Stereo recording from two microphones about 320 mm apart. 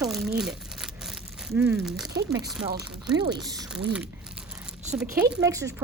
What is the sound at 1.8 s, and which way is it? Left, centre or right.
Speech, centre.